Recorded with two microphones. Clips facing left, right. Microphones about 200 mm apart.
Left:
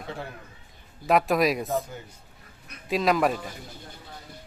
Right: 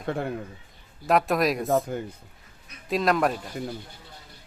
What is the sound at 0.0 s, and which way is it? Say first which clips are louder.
Speech: right 7 dB; 55° right (ahead or behind).